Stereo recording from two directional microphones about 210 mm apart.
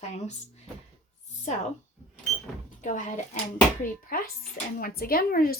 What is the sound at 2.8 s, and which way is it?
Speech, 35° left (ahead or behind).